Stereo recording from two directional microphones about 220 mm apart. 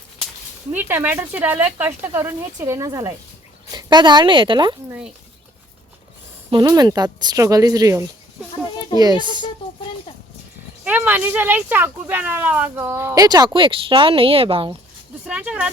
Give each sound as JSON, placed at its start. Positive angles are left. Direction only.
{"t": 0.7, "sound": "a woman's voice", "side_deg": -10}
{"t": 6.5, "sound": "a woman's voice", "side_deg": -20}
{"t": 10.8, "sound": "speech", "side_deg": -10}
{"t": 15.3, "sound": "speech", "side_deg": -5}